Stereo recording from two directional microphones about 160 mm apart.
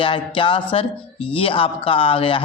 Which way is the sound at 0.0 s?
30° left (ahead or behind).